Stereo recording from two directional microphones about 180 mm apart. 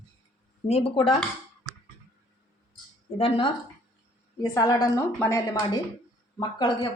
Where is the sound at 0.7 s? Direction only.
30° left (ahead or behind).